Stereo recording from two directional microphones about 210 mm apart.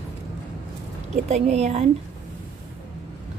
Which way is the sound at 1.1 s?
30° right (ahead or behind).